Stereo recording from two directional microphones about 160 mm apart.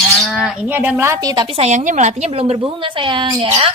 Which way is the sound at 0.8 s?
15° right (ahead or behind).